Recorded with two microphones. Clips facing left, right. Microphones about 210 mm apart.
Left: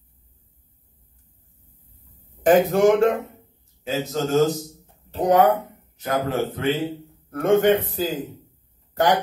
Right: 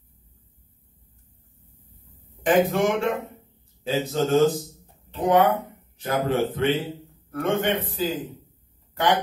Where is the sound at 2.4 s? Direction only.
40° left (ahead or behind).